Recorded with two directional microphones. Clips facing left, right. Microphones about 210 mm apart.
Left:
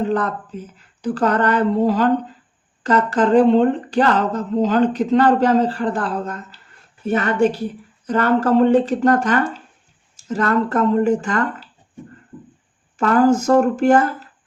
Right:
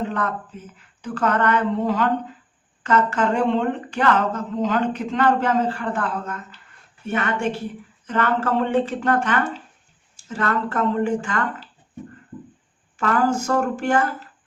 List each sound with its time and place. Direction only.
0.1 s speech: 35° left (ahead or behind)
13.0 s speech: 40° left (ahead or behind)